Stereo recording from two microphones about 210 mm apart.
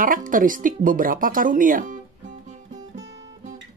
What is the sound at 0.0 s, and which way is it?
Speech, 40° right (ahead or behind).